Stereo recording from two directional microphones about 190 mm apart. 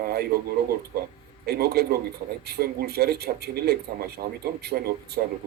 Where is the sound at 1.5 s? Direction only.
55° right (ahead or behind).